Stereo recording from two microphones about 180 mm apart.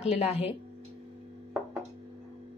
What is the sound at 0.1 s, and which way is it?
Speech, 35° left (ahead or behind).